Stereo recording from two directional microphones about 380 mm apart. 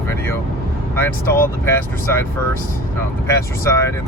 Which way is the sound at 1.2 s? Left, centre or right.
Left.